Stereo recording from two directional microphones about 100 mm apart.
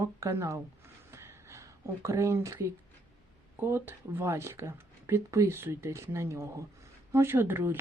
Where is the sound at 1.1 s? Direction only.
25° right (ahead or behind).